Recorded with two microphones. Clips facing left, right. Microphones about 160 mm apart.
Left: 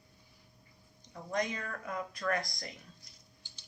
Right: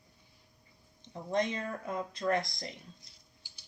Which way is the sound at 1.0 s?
25° right (ahead or behind).